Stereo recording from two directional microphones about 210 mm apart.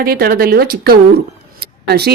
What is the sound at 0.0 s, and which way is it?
Speech, 45° right (ahead or behind).